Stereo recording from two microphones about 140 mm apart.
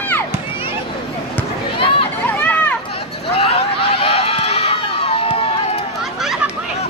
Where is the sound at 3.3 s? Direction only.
45° left (ahead or behind).